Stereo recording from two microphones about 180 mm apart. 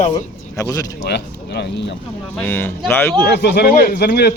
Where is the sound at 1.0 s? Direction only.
65° left (ahead or behind).